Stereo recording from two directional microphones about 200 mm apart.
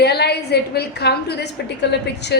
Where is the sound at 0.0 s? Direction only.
55° left (ahead or behind).